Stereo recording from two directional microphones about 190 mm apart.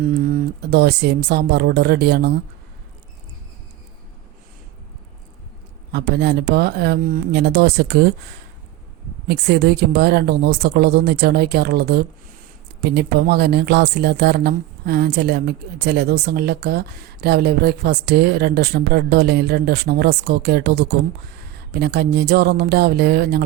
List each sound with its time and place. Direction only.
0.1 s speech: 45° right (ahead or behind)
5.9 s speech: 60° right (ahead or behind)
9.2 s speech: 55° right (ahead or behind)